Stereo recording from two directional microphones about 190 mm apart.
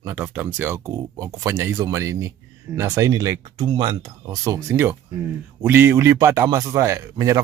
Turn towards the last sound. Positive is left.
turn(degrees=-20)  # may be behind; listen again after turning